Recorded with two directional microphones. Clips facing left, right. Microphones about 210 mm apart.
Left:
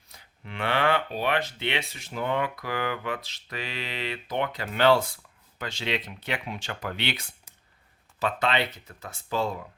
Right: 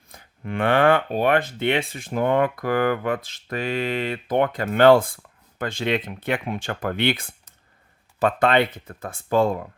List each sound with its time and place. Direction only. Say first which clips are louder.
0.1 s speech: right 11 dB; 50° right (ahead or behind)